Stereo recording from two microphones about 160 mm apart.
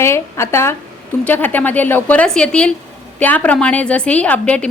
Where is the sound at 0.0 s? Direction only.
15° left (ahead or behind).